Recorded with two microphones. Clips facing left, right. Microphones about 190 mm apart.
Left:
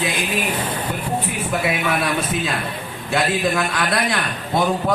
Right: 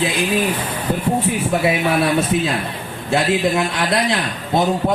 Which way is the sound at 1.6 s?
30° right (ahead or behind).